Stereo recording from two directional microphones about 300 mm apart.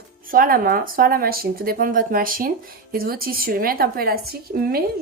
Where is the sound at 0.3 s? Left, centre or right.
Right.